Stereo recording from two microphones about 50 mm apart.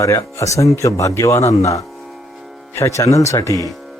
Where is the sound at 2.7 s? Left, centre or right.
Left.